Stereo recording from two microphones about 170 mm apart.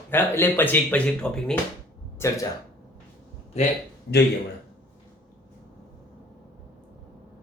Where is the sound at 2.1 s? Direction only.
15° left (ahead or behind).